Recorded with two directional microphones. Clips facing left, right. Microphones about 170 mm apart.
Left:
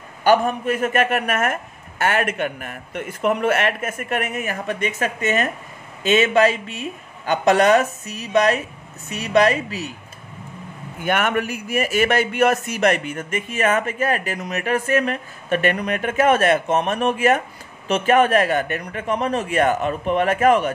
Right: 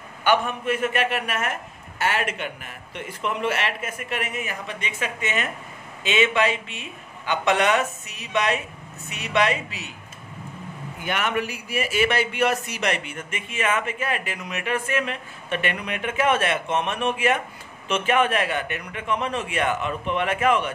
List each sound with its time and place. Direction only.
0.2 s a man's voice: 40° left (ahead or behind)
11.1 s a man's voice: 50° left (ahead or behind)